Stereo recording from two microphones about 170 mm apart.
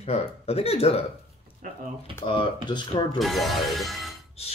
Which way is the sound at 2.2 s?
30° left (ahead or behind).